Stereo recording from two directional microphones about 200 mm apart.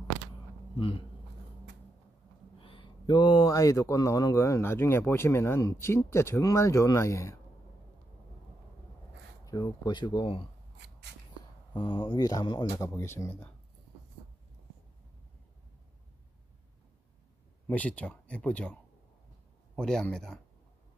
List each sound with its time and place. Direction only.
0.7 s speech: 25° left (ahead or behind)
2.6 s speech: 25° left (ahead or behind)
9.4 s speech: 20° left (ahead or behind)
11.7 s speech: 25° left (ahead or behind)
17.6 s speech: 5° left (ahead or behind)